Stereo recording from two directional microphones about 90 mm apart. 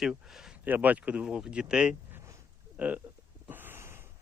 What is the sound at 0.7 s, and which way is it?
Speech, 20° right (ahead or behind).